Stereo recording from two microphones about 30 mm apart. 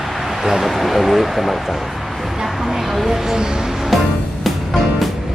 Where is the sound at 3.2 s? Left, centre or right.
Centre.